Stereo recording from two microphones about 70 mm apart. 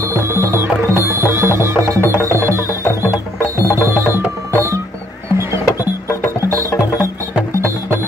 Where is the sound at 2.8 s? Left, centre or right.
Left.